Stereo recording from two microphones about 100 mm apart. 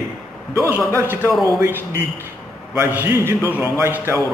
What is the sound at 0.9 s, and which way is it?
Speech, 20° right (ahead or behind).